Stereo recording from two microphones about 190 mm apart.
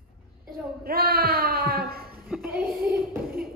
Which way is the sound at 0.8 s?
50° right (ahead or behind).